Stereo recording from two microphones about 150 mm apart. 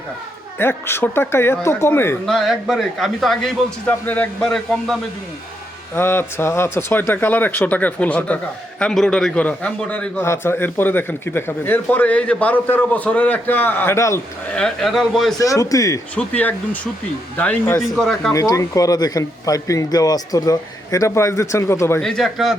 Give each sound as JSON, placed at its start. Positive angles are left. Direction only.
{"t": 0.6, "sound": "a man's voice", "side_deg": 15}
{"t": 2.2, "sound": "a man's voice", "side_deg": 0}
{"t": 5.9, "sound": "a man's voice", "side_deg": 15}
{"t": 14.4, "sound": "a man's voice", "side_deg": 5}
{"t": 15.4, "sound": "speech", "side_deg": 20}
{"t": 16.1, "sound": "a man's voice", "side_deg": 10}
{"t": 17.8, "sound": "a man's voice", "side_deg": 0}
{"t": 18.3, "sound": "speech", "side_deg": 20}
{"t": 22.0, "sound": "a man's voice", "side_deg": 0}